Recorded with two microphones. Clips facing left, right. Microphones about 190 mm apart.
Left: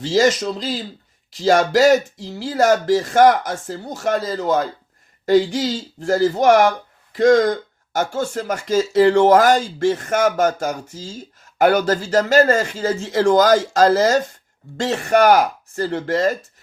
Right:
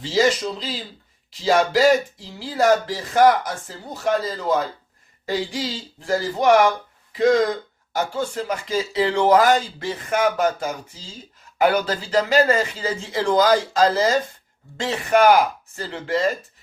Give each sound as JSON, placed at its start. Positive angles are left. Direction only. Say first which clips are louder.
{"t": 0.1, "sound": "speech", "louder": "left 3 dB", "side_deg": 45}